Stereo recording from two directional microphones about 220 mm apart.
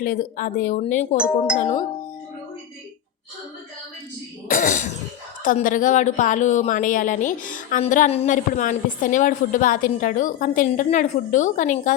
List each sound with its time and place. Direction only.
0.0 s a woman's voice: 35° left (ahead or behind)
4.4 s a woman's voice: 40° left (ahead or behind)